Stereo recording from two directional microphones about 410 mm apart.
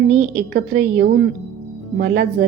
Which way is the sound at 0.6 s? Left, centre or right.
Right.